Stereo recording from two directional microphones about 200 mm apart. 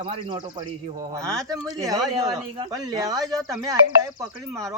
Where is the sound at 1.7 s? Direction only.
20° right (ahead or behind).